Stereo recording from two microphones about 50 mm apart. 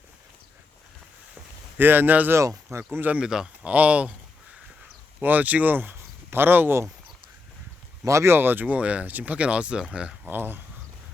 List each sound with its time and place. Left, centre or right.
1.8 s speech: right
2.3 s speech: right
3.2 s speech: centre
3.6 s speech: right
5.2 s speech: right
6.0 s a sound: right
8.0 s speech: right
8.3 s speech: right
8.6 s speech: right
9.4 s speech: right
10.2 s speech: right